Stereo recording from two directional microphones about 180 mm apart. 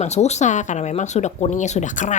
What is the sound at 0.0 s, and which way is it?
Speech, 40° left (ahead or behind).